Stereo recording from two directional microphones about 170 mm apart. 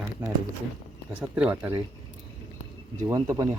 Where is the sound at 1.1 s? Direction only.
5° right (ahead or behind).